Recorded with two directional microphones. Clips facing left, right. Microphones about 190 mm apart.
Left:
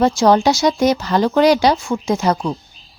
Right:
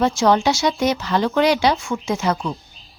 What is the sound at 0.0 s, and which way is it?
Speech, 40° left (ahead or behind).